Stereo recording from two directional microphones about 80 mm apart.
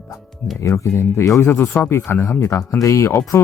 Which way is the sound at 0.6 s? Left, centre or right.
Left.